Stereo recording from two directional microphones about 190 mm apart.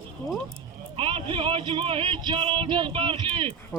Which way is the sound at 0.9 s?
25° right (ahead or behind).